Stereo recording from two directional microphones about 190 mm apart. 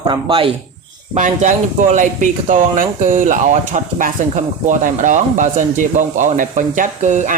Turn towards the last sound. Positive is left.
turn(degrees=-40)  # may be behind; listen again after turning